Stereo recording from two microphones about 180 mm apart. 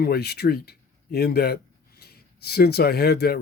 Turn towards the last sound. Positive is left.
turn(degrees=60)  # may be behind; listen again after turning